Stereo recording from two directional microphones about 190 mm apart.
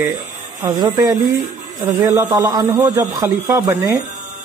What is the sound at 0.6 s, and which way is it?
A man's voice, 15° right (ahead or behind).